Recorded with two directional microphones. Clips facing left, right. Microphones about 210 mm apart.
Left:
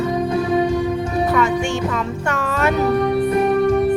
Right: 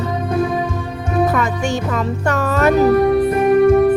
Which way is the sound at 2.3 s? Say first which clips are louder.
Right 5 dB; 40° right (ahead or behind).